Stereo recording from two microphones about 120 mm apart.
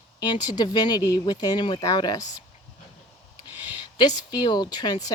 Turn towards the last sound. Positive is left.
turn(degrees=35)  # may be behind; listen again after turning